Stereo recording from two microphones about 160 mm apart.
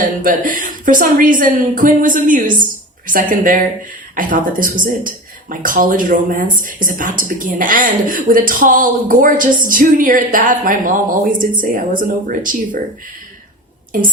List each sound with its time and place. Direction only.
0.0 s a woman's voice: 55° right (ahead or behind)